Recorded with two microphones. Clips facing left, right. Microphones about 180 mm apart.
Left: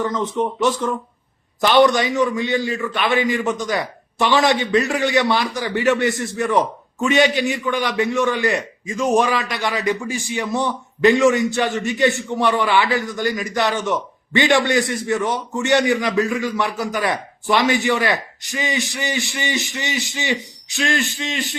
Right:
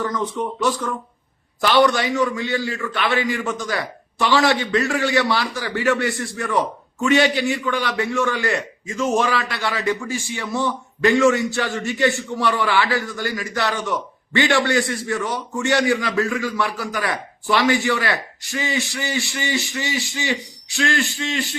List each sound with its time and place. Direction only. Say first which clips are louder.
0.0 s a man's voice: left 3 dB; 20° left (ahead or behind)